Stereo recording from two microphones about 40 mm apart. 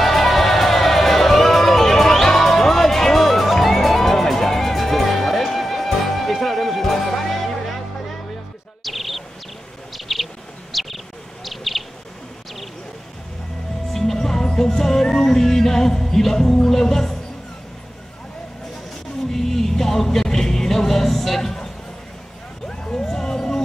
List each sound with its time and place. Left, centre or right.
0.0 s music: centre
8.8 s bird: centre
13.9 s music: centre
19.3 s music: centre
22.7 s music: centre